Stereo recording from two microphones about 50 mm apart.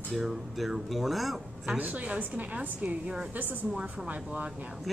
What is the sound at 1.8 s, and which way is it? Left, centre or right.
A woman's voice, right.